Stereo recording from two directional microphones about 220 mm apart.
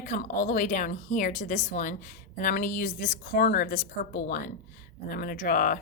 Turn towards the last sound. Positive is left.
turn(degrees=40)  # may be behind; listen again after turning